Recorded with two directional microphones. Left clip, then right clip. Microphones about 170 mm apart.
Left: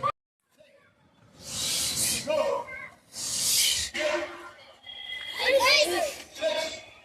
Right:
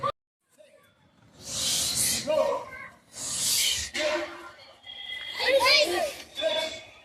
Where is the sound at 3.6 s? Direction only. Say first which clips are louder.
Even; centre (ahead or behind).